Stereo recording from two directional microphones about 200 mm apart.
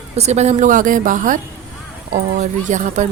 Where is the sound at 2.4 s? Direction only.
40° right (ahead or behind).